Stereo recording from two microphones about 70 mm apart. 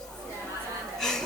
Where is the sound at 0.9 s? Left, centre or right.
Centre.